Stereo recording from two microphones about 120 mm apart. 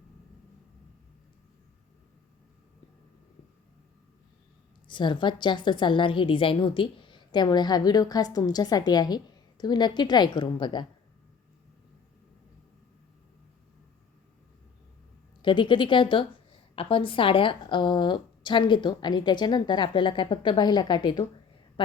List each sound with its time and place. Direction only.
4.9 s a woman's voice: 40° left (ahead or behind)
15.4 s a woman's voice: 40° left (ahead or behind)
21.8 s a sound: 45° left (ahead or behind)